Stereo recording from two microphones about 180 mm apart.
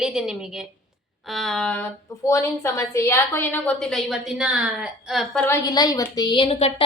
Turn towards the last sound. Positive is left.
turn(degrees=30)  # may be behind; listen again after turning